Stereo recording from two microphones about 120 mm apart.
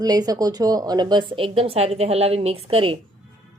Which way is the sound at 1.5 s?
55° right (ahead or behind).